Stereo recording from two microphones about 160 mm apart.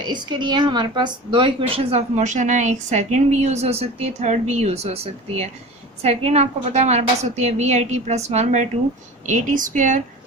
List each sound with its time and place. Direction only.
0.0 s a woman's voice: 25° right (ahead or behind); by 10.0 s 55° right (ahead or behind)